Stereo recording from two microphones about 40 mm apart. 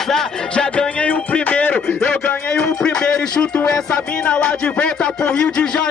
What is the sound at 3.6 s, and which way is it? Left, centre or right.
Speech, centre.